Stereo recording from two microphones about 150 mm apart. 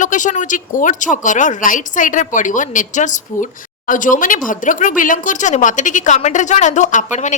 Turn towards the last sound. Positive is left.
turn(degrees=55)  # may be behind; listen again after turning